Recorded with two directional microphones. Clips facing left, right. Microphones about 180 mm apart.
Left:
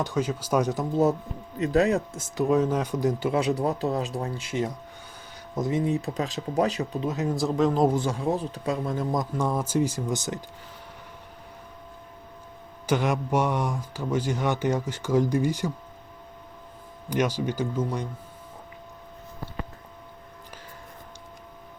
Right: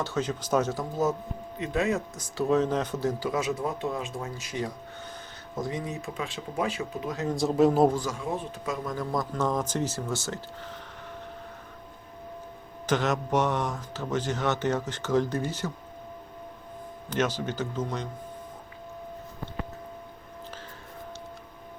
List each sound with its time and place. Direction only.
0.0 s speech: 10° left (ahead or behind)
1.5 s speech: 40° left (ahead or behind)
2.1 s speech: 20° left (ahead or behind); by 7.1 s 40° left (ahead or behind)
7.3 s speech: 5° right (ahead or behind)
7.9 s speech: 30° left (ahead or behind)
9.3 s speech: 10° left (ahead or behind)
12.9 s speech: 10° left (ahead or behind)
17.1 s speech: 10° left (ahead or behind)